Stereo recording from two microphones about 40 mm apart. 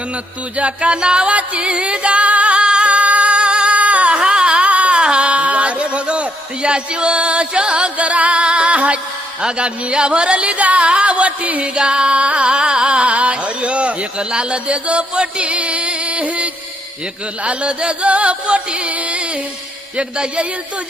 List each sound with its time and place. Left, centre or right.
0.5 s music: right
9.4 s speech: right
12.5 s speech: right
17.4 s music: right
20.0 s speech: right